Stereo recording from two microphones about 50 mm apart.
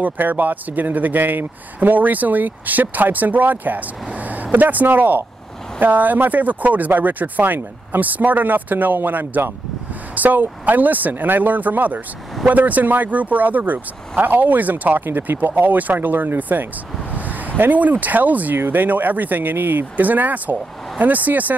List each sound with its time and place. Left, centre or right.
0.0 s speech: right